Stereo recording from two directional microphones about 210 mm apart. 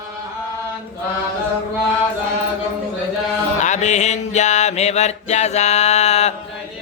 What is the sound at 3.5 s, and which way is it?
Music, 35° left (ahead or behind).